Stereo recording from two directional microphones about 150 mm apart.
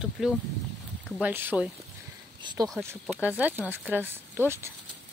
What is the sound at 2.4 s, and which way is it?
Speech, 30° right (ahead or behind).